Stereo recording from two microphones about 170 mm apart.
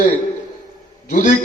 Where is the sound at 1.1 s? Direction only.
50° left (ahead or behind).